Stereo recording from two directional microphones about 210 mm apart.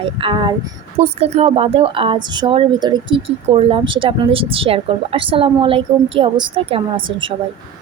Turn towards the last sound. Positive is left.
turn(degrees=-25)  # may be behind; listen again after turning